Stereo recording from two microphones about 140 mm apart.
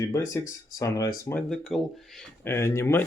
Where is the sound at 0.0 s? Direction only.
20° left (ahead or behind).